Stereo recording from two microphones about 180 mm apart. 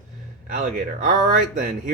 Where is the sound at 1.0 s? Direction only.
45° right (ahead or behind).